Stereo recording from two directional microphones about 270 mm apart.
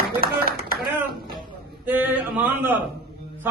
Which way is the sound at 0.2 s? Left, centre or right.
Right.